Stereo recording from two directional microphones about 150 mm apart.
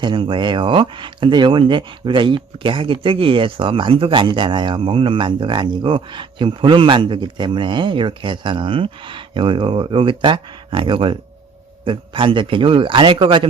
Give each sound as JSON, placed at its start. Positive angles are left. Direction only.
{"t": 0.0, "sound": "speech", "side_deg": -35}